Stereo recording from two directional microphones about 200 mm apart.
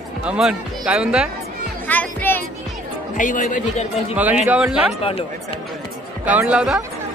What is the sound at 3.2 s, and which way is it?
Speech, 40° left (ahead or behind).